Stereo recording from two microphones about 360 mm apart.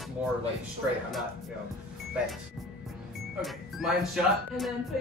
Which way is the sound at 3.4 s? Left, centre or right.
Centre.